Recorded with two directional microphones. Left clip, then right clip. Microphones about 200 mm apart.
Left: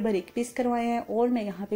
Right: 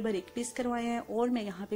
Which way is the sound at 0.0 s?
10° right (ahead or behind).